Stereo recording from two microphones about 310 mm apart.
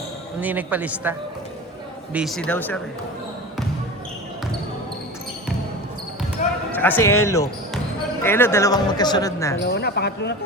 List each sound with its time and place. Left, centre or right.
0.3 s a man's voice: centre
2.1 s a man's voice: centre
6.4 s basketball bounce: left
6.7 s speech: centre
9.6 s speech: left